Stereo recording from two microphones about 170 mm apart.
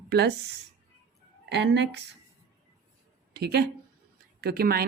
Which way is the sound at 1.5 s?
90° right.